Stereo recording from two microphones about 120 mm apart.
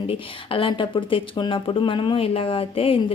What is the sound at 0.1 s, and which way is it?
Speech, 45° left (ahead or behind).